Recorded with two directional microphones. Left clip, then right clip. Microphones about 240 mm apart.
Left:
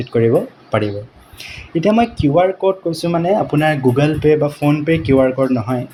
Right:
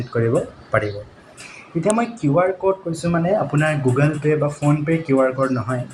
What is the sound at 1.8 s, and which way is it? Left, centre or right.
Speech, left.